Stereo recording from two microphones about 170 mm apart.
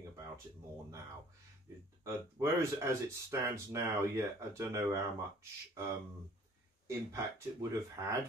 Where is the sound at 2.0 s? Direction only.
15° right (ahead or behind).